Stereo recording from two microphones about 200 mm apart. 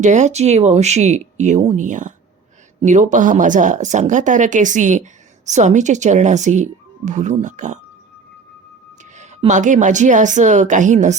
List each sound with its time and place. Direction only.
0.0 s speech: 35° right (ahead or behind)
9.1 s speech: 35° right (ahead or behind)